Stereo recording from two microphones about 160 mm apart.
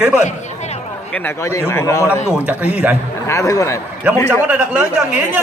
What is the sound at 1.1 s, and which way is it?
Speech, 10° left (ahead or behind).